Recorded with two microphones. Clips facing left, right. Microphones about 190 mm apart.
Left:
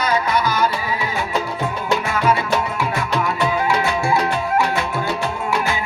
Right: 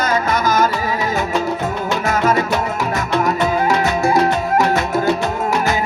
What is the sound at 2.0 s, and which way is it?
Music, 40° right (ahead or behind).